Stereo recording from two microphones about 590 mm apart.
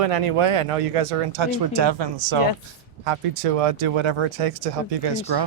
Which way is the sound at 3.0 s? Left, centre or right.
Right.